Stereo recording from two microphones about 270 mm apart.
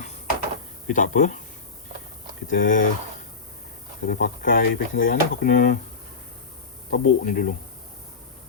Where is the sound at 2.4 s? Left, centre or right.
Left.